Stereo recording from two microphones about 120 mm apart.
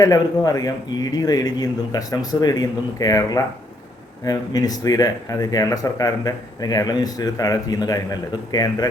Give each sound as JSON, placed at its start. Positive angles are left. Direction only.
{"t": 0.0, "sound": "speech", "side_deg": 30}